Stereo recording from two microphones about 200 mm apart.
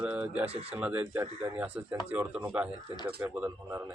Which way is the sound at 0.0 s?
5° right (ahead or behind).